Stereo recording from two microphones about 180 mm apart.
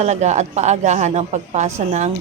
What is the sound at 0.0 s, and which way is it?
A woman's voice, 40° right (ahead or behind).